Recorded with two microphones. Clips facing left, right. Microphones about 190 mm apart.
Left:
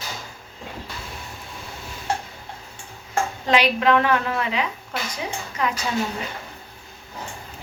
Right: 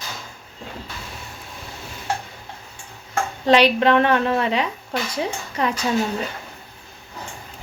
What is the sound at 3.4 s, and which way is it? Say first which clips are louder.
Speech: right 5 dB; 35° right (ahead or behind).